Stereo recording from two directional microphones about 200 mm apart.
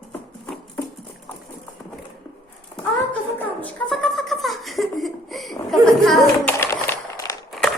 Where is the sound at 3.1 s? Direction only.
5° left (ahead or behind).